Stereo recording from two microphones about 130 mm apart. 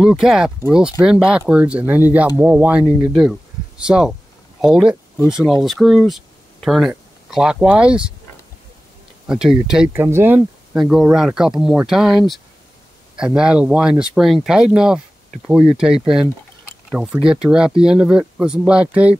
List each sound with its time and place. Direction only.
0.2 s speech: 5° right (ahead or behind)
3.1 s speech: 5° right (ahead or behind)
9.3 s speech: 5° right (ahead or behind)
9.9 s speech: 20° right (ahead or behind)
10.8 s speech: centre (ahead or behind)